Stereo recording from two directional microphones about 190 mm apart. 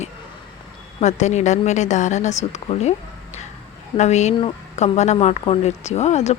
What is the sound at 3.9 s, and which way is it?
A woman's voice, 35° left (ahead or behind).